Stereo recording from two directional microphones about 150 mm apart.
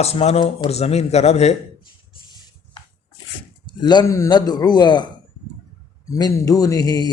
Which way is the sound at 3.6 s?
30° left (ahead or behind).